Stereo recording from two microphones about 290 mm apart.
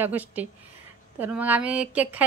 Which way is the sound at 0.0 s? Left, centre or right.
Centre.